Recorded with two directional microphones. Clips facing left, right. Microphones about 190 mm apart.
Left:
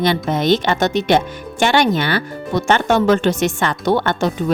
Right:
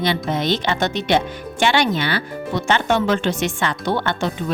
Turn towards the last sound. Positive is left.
turn(degrees=45)  # may be behind; listen again after turning